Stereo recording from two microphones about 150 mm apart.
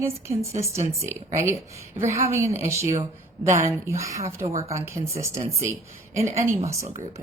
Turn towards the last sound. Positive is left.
turn(degrees=-20)  # may be behind; listen again after turning